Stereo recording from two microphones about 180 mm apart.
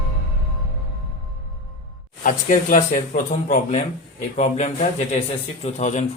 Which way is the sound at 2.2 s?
45° left (ahead or behind).